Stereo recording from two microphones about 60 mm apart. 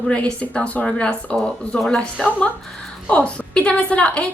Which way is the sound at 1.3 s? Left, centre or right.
Centre.